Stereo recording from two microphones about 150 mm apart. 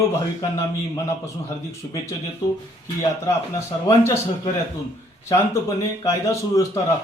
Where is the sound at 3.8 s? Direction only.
20° left (ahead or behind).